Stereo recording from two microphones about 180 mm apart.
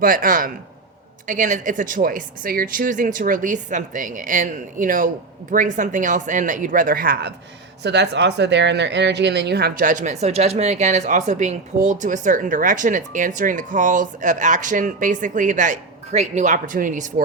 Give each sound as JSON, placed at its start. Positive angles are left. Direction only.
{"t": 0.0, "sound": "speech", "side_deg": -50}
{"t": 7.8, "sound": "speech", "side_deg": -70}